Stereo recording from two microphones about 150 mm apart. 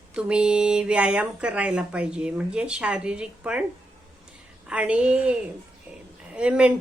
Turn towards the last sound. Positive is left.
turn(degrees=-5)  # may be behind; listen again after turning